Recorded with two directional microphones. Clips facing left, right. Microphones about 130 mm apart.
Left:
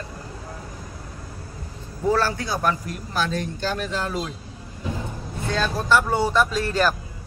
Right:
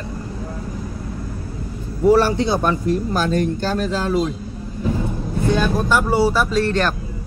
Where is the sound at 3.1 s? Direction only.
45° right (ahead or behind).